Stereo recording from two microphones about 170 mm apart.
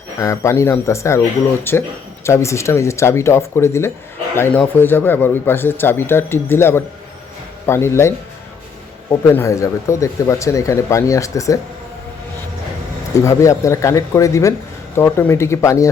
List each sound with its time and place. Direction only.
0.2 s speech: 15° left (ahead or behind)
13.1 s speech: 20° left (ahead or behind)